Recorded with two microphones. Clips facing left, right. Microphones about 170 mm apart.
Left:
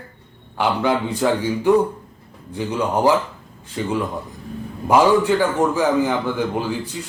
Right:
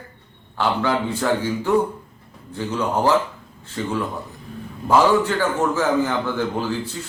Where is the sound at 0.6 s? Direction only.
15° left (ahead or behind).